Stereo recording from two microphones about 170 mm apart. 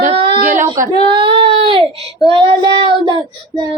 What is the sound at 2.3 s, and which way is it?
Child singing, 25° right (ahead or behind).